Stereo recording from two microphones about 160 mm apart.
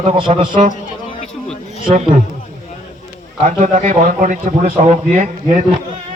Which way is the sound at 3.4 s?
50° right (ahead or behind).